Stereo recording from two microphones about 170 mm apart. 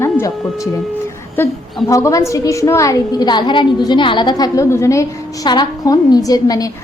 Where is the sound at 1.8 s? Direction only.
20° left (ahead or behind).